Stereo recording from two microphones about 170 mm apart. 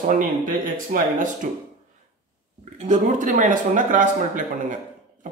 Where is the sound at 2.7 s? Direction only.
45° right (ahead or behind).